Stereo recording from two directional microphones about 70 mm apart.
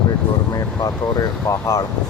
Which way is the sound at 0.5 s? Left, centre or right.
Left.